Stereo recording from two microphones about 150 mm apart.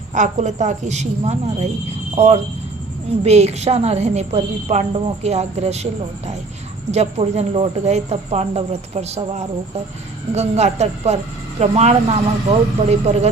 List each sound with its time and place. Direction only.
0.1 s a woman's voice: 55° right (ahead or behind)